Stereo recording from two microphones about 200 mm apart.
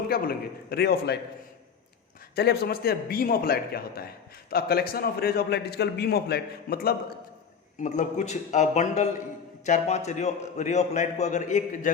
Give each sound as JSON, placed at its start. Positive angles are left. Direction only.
{"t": 0.1, "sound": "a man's voice", "side_deg": 50}
{"t": 2.3, "sound": "a man's voice", "side_deg": 55}
{"t": 7.8, "sound": "a man's voice", "side_deg": 35}